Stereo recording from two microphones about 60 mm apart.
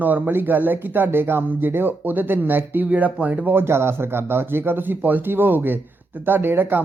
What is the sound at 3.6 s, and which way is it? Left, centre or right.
A woman's voice, right.